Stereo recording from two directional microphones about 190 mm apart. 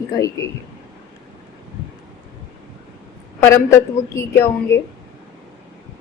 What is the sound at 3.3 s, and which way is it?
A woman's voice, 15° left (ahead or behind).